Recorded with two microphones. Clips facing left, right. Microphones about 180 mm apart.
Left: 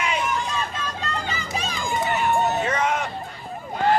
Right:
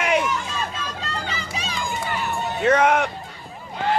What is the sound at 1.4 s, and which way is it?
Run, 50° left (ahead or behind).